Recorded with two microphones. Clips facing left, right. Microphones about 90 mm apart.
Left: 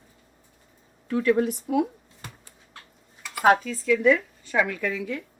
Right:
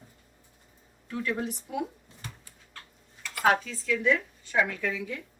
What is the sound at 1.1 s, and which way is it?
Speech, 75° left (ahead or behind).